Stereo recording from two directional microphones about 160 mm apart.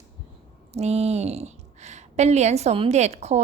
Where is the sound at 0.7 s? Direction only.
40° right (ahead or behind).